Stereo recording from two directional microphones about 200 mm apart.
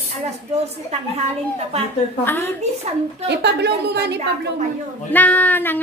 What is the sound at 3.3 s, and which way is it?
A woman's voice, 55° right (ahead or behind).